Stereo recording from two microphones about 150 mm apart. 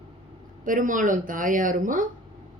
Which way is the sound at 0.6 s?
65° right (ahead or behind).